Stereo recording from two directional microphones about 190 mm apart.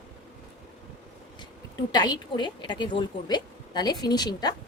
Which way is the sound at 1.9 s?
20° left (ahead or behind).